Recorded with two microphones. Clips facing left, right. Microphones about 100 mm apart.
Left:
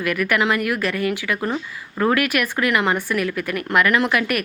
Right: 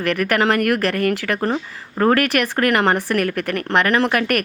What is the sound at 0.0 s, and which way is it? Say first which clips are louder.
Speech: right 2 dB; 50° right (ahead or behind).